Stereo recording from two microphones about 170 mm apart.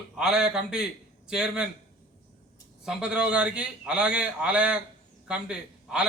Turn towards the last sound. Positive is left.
turn(degrees=-5)  # may be behind; listen again after turning